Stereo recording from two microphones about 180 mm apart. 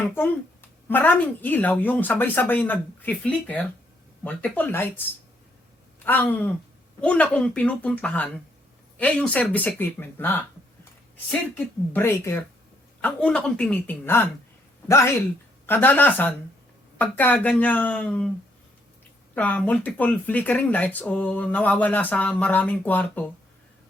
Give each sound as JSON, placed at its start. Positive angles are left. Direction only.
{"t": 0.9, "sound": "speech", "side_deg": 10}
{"t": 6.1, "sound": "speech", "side_deg": 10}
{"t": 19.3, "sound": "speech", "side_deg": 10}